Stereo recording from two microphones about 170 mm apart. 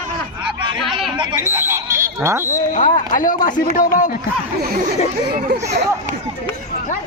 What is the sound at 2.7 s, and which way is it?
Speech, 50° left (ahead or behind).